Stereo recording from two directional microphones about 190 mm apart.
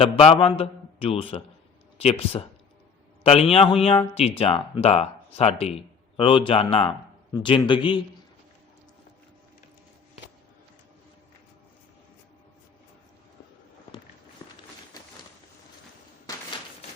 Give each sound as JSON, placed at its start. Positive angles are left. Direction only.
{"t": 0.0, "sound": "a man's voice", "side_deg": 30}
{"t": 3.2, "sound": "a man's voice", "side_deg": 30}
{"t": 14.4, "sound": "a sound", "side_deg": 25}